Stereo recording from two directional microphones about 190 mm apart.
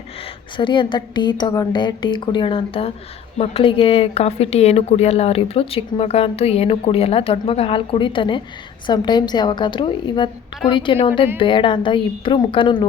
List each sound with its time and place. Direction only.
0.5 s a woman's voice: 25° left (ahead or behind)